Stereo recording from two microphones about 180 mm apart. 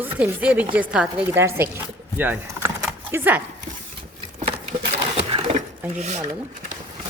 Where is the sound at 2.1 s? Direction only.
10° right (ahead or behind).